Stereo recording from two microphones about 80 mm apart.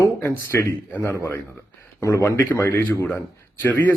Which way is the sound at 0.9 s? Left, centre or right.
Left.